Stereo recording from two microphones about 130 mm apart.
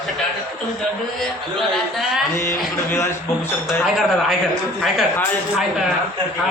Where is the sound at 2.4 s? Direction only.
20° left (ahead or behind).